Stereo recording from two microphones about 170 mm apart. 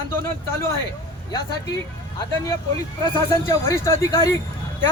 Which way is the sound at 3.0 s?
20° left (ahead or behind).